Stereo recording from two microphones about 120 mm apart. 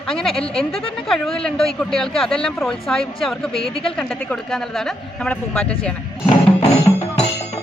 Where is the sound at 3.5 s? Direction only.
50° left (ahead or behind).